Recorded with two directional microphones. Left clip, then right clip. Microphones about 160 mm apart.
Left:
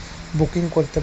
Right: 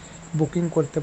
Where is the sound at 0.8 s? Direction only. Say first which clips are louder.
Left 3 dB; centre (ahead or behind).